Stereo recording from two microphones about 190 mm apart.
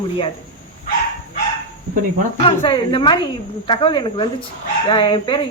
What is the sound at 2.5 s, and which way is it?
Speech, 25° left (ahead or behind).